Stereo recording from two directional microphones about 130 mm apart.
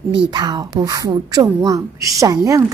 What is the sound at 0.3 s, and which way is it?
A woman's voice, 35° right (ahead or behind).